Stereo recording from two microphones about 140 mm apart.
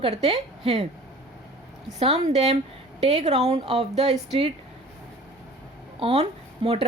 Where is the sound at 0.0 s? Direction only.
45° right (ahead or behind).